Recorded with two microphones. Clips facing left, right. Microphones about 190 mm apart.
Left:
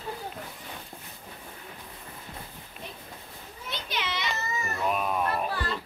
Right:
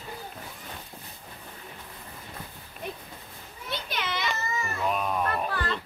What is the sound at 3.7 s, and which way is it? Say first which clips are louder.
Children playing: right 1 dB; 50° right (ahead or behind).